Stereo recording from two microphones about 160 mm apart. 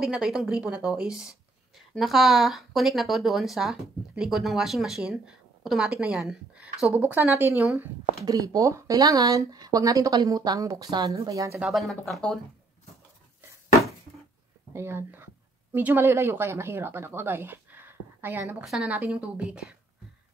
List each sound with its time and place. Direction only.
0.0 s speech: 5° right (ahead or behind)
8.3 s speech: 25° right (ahead or behind)
11.6 s speech: centre (ahead or behind)
14.7 s a woman's voice: 15° right (ahead or behind)